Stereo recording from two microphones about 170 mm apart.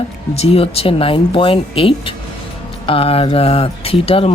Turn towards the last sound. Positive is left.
turn(degrees=35)  # may be behind; listen again after turning